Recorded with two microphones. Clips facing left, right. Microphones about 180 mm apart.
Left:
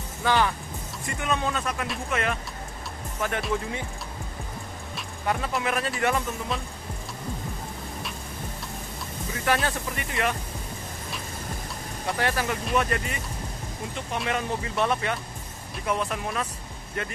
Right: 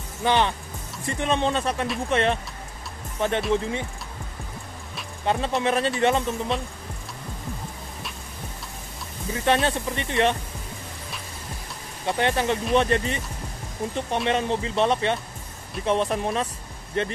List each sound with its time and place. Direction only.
0.2 s speech: 20° right (ahead or behind)
5.2 s speech: 25° right (ahead or behind)
9.3 s speech: 25° right (ahead or behind)
12.1 s speech: 25° right (ahead or behind)